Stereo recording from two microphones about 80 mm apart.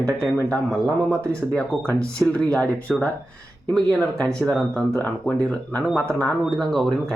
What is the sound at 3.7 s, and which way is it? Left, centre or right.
Speech, centre.